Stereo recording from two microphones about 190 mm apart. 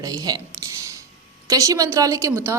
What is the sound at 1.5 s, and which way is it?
Speech, 15° right (ahead or behind).